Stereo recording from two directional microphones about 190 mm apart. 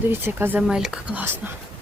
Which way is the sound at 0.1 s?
10° right (ahead or behind).